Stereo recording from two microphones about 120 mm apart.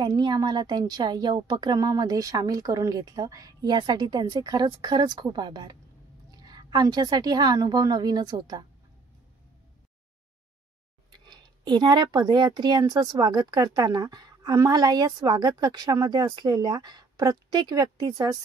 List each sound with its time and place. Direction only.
0.0 s a woman's voice: 40° right (ahead or behind)
11.1 s a woman's voice: 40° right (ahead or behind)